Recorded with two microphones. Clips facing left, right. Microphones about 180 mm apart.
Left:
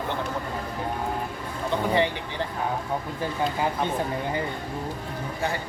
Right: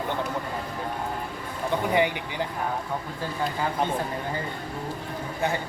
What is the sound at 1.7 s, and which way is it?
Speech, 15° right (ahead or behind).